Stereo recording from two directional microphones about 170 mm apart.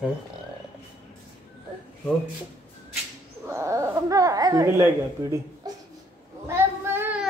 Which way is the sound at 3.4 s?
15° right (ahead or behind).